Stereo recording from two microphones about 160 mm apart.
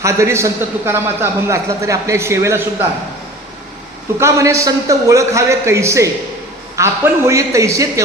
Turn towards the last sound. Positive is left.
turn(degrees=-20)  # may be behind; listen again after turning